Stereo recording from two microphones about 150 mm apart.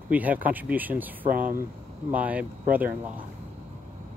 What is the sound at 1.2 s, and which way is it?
Speech, 65° right (ahead or behind).